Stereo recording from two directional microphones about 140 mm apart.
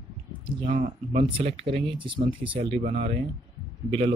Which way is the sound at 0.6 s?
55° right (ahead or behind).